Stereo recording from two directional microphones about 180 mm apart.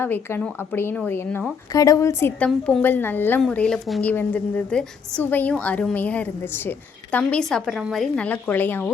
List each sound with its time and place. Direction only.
0.0 s a woman's voice: 10° left (ahead or behind)